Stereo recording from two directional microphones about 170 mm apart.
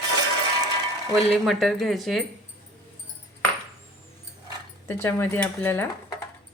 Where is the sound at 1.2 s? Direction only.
Centre (ahead or behind).